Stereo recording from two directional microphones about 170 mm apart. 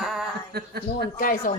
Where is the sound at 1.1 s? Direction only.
55° left (ahead or behind).